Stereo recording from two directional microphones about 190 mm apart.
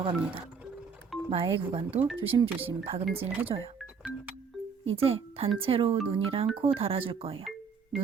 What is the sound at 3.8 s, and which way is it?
Music, 5° right (ahead or behind).